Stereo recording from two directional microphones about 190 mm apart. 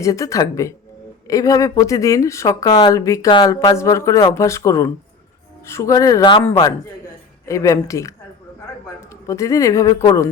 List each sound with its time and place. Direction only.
0.0 s speech: 15° left (ahead or behind)